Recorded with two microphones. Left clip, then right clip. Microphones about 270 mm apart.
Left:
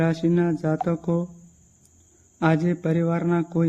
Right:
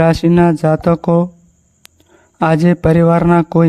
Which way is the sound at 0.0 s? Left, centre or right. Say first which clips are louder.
Right 11 dB; right.